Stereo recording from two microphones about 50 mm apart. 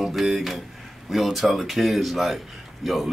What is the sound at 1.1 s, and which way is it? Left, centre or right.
Speech, centre.